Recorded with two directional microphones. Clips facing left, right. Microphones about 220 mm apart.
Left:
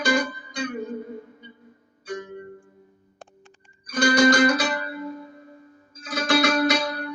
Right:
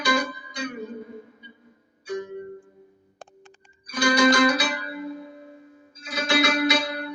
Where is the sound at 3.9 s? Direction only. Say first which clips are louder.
Left 2 dB; 45° left (ahead or behind).